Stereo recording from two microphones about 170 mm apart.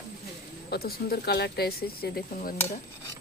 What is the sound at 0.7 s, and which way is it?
Speech, 65° left (ahead or behind).